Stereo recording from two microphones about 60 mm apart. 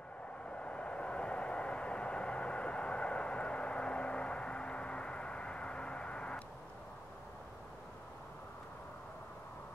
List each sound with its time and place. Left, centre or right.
0.5 s vehicle: centre